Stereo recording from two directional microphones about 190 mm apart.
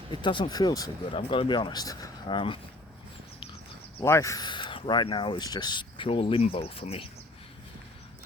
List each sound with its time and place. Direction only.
0.1 s speech: 25° left (ahead or behind)
4.0 s speech: 15° left (ahead or behind); by 7.1 s 30° left (ahead or behind)